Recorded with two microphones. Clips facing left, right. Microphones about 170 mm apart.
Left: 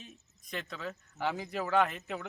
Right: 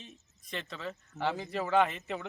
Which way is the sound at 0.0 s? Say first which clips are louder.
Even; 5° left (ahead or behind).